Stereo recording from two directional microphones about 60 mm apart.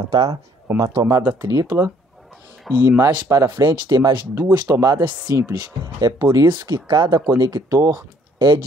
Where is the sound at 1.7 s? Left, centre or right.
Right.